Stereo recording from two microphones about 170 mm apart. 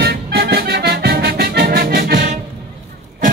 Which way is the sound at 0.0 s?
70° right (ahead or behind).